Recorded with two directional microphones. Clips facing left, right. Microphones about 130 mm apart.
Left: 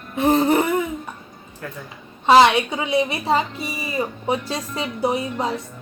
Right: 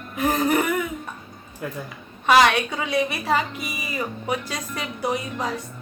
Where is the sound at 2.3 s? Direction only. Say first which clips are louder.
Left 4 dB; 25° left (ahead or behind).